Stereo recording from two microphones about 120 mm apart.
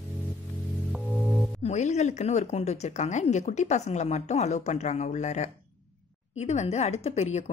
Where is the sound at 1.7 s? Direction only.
75° left (ahead or behind).